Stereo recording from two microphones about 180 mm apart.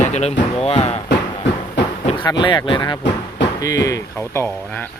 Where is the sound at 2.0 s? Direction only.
25° left (ahead or behind).